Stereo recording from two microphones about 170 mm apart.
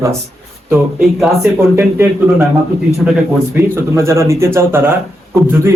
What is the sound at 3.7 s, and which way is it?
A man's voice, 15° right (ahead or behind).